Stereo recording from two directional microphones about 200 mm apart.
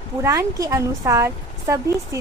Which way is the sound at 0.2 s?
15° right (ahead or behind).